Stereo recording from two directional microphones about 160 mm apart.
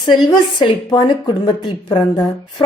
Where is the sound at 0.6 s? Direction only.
30° left (ahead or behind).